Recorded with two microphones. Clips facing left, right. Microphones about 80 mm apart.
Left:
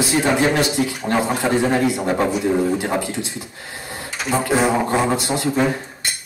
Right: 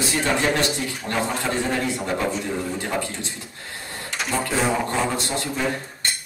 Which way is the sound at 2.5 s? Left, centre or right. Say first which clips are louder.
Left 9 dB; left.